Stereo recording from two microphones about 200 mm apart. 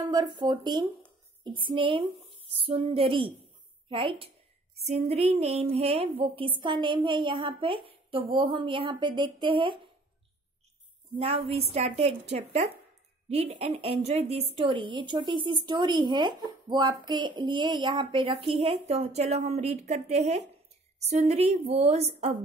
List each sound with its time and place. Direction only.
0.0 s a woman's voice: 20° right (ahead or behind)
11.1 s a woman's voice: 30° right (ahead or behind)